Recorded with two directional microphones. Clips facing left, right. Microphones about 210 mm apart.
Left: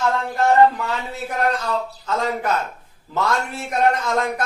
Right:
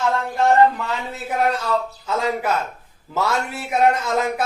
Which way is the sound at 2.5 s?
5° right (ahead or behind).